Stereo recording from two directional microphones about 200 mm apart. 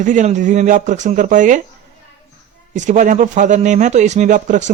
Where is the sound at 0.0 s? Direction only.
40° right (ahead or behind).